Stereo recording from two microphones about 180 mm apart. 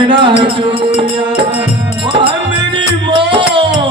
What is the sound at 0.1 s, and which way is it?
Music, 30° right (ahead or behind).